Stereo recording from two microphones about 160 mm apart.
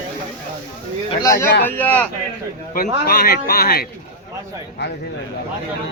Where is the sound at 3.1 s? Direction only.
70° left (ahead or behind).